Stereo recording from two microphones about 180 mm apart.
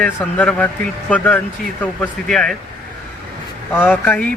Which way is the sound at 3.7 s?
10° left (ahead or behind).